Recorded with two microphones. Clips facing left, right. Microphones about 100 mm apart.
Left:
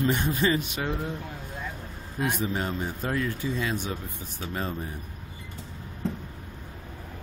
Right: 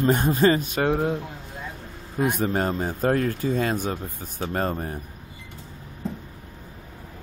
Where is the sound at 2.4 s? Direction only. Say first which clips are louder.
Right 5 dB; 50° right (ahead or behind).